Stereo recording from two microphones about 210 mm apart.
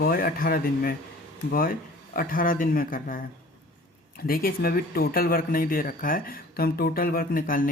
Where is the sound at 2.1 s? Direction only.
40° left (ahead or behind).